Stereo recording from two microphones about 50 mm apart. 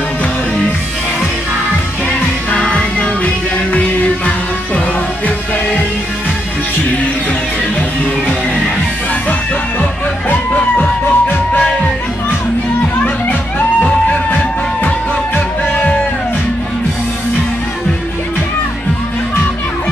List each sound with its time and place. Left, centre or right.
2.5 s music: left
10.3 s music: left